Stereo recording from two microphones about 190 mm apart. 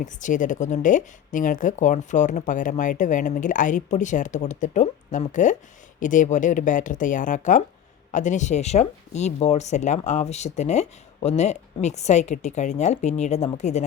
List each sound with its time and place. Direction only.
0.0 s speech: 40° left (ahead or behind)